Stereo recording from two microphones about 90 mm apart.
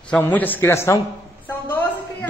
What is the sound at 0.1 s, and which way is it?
A man's voice, 20° left (ahead or behind).